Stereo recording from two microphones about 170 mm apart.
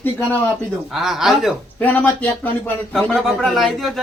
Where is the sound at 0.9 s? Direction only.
Centre (ahead or behind).